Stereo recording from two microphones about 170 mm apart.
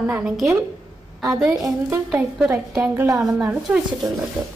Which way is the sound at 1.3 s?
Centre (ahead or behind).